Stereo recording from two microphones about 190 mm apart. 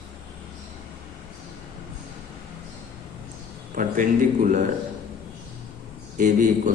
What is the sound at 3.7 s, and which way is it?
Speech, 45° right (ahead or behind).